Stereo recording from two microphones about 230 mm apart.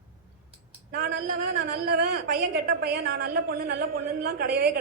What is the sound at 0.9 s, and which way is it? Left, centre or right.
A woman's voice, right.